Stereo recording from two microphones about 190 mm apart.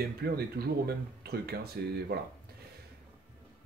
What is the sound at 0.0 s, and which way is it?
Speech, 55° right (ahead or behind).